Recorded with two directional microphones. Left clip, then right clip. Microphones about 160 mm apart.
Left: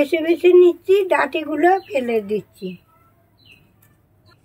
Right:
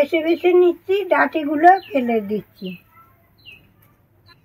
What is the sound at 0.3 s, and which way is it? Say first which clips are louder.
A woman's voice: left 5 dB; 25° left (ahead or behind).